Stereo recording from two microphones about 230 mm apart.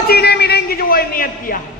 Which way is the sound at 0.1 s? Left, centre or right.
Left.